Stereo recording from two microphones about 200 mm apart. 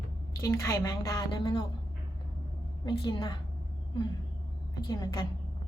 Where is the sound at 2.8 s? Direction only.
20° left (ahead or behind).